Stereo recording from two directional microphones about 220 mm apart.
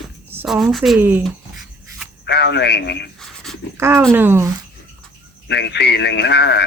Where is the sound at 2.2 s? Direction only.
50° left (ahead or behind).